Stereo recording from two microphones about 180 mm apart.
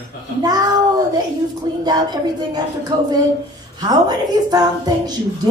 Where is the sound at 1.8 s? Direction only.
20° right (ahead or behind).